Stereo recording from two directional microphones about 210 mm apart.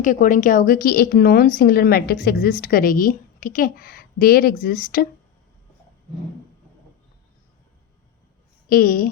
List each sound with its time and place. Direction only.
0.0 s speech: 40° left (ahead or behind)
8.7 s speech: 45° left (ahead or behind)